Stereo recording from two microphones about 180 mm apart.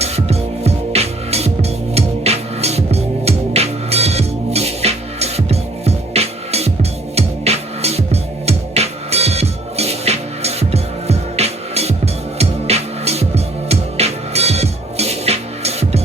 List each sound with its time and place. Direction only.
0.0 s music: 35° right (ahead or behind)